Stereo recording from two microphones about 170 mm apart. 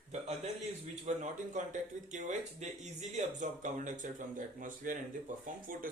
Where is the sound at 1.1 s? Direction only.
45° right (ahead or behind).